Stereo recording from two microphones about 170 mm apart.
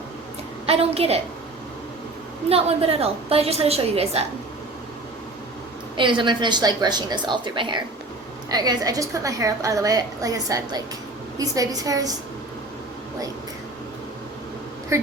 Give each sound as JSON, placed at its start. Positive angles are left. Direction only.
{"t": 0.7, "sound": "a woman's voice", "side_deg": -35}
{"t": 2.5, "sound": "a woman's voice", "side_deg": -35}
{"t": 6.0, "sound": "a woman's voice", "side_deg": -30}